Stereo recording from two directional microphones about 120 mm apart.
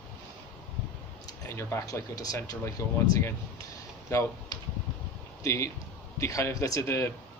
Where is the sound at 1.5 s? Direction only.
20° left (ahead or behind).